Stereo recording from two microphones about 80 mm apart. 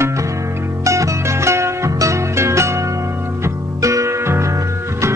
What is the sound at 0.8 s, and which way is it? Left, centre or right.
Music, right.